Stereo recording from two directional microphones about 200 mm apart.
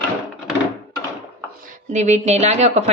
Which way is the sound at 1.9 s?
35° right (ahead or behind).